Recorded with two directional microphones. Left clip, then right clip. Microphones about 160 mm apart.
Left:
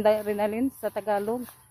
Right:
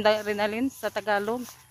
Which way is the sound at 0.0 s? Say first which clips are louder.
Even; 10° left (ahead or behind).